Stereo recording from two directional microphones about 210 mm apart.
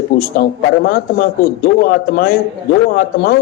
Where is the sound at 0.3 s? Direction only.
45° left (ahead or behind).